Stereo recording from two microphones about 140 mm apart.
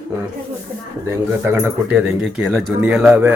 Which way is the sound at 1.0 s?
20° right (ahead or behind).